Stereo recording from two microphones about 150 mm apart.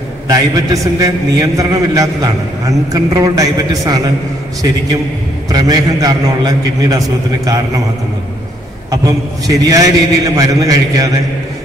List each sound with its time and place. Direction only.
0.3 s a man's voice: 25° right (ahead or behind)
5.5 s a man's voice: 25° right (ahead or behind)
8.9 s a man's voice: 25° right (ahead or behind)